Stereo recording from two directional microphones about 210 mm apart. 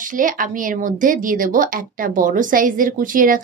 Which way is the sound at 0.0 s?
40° right (ahead or behind).